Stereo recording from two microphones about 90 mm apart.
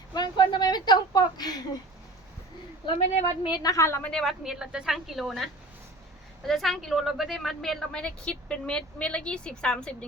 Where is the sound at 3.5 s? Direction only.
40° left (ahead or behind).